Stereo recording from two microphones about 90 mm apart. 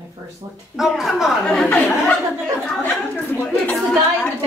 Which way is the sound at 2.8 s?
20° left (ahead or behind).